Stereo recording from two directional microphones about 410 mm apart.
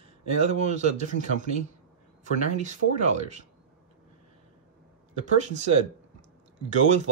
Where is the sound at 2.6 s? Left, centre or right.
Centre.